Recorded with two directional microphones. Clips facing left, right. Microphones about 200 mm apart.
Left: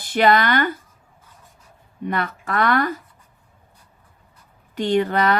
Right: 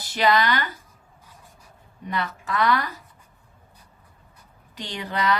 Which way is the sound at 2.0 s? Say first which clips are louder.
Left 4 dB; 55° left (ahead or behind).